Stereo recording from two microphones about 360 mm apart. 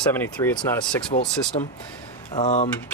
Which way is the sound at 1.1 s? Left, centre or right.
Left.